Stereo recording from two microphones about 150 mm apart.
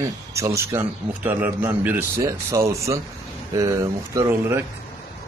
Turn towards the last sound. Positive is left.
turn(degrees=-15)  # may be behind; listen again after turning